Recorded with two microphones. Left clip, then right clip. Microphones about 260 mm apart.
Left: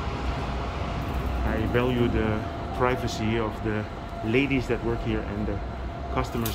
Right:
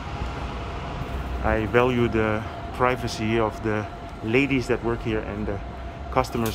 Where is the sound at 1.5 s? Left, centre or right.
Centre.